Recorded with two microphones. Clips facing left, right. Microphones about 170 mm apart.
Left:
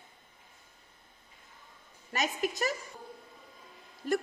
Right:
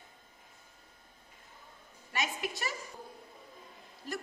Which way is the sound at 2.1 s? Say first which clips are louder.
Left 4 dB; 40° left (ahead or behind).